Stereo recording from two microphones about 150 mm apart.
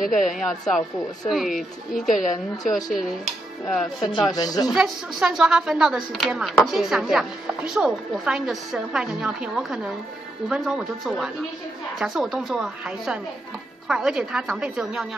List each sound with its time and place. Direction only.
0.0 s speech: 60° left (ahead or behind)
0.4 s speech: centre (ahead or behind)
4.0 s speech: 25° left (ahead or behind)
4.7 s speech: 5° right (ahead or behind)